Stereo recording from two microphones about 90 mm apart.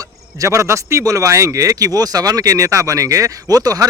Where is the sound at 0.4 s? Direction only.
35° right (ahead or behind).